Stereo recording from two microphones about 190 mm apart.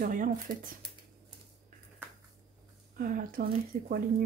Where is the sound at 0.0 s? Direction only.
45° right (ahead or behind).